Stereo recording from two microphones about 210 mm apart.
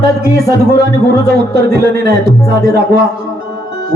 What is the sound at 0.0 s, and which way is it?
A man's voice, 45° right (ahead or behind).